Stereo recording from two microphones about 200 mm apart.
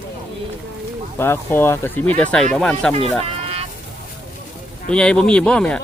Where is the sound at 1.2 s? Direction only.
10° left (ahead or behind).